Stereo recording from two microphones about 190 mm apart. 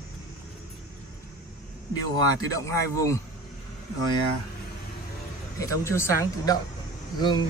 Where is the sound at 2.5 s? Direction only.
15° left (ahead or behind).